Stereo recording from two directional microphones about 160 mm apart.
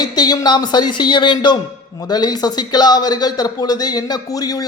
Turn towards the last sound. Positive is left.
turn(degrees=20)  # may be behind; listen again after turning